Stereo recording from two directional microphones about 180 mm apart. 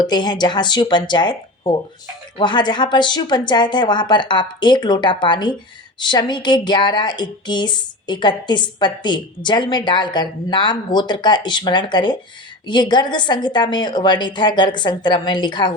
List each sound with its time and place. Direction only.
0.0 s speech: 25° left (ahead or behind)